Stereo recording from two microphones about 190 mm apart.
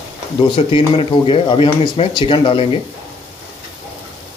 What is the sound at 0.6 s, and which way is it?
Speech, 30° left (ahead or behind).